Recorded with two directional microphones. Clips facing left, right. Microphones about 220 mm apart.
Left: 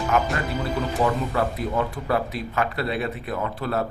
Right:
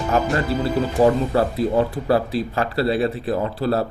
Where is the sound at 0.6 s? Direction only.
35° right (ahead or behind).